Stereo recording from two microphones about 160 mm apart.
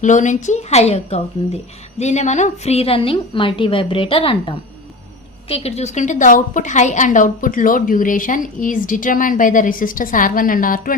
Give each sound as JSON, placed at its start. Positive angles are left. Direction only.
{"t": 0.0, "sound": "a woman's voice", "side_deg": 50}